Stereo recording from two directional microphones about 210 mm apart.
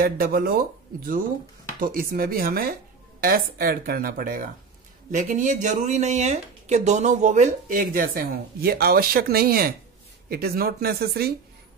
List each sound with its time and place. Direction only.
0.0 s speech: 45° right (ahead or behind)
1.8 s speech: 45° right (ahead or behind)